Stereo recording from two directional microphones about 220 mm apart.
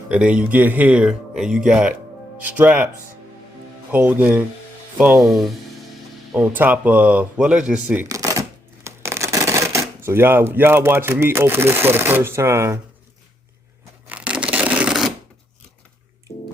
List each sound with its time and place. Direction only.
0.1 s speech: 5° right (ahead or behind)
3.9 s speech: 5° right (ahead or behind)
6.3 s a sound: 10° right (ahead or behind)
10.0 s speech: 10° right (ahead or behind)
14.1 s a sound: 5° right (ahead or behind)
16.3 s music: 30° left (ahead or behind)